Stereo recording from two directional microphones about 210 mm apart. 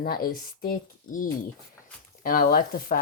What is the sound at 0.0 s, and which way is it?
Speech, 45° left (ahead or behind).